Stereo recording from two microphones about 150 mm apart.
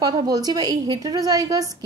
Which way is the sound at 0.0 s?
25° right (ahead or behind).